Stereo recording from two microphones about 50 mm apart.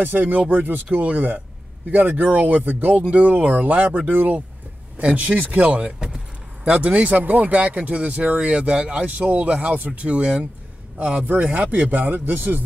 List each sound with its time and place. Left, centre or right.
0.0 s speech: right
3.1 s speech: right
5.9 s speech: centre; by 12.6 s right